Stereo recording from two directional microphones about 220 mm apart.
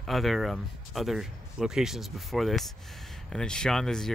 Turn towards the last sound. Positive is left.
turn(degrees=0)  # may be behind; listen again after turning